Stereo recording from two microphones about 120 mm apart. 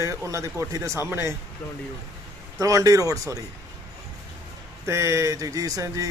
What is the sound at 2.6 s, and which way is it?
Speech, 30° right (ahead or behind).